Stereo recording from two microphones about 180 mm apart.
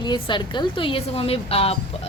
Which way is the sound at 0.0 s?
25° left (ahead or behind).